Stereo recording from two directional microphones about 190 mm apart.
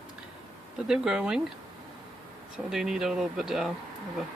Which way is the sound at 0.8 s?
5° right (ahead or behind).